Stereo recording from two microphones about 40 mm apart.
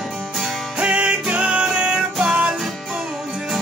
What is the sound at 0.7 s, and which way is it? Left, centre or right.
Music, right.